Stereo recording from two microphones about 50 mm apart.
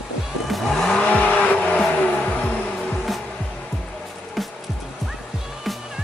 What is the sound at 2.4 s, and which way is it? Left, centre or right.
Music, centre.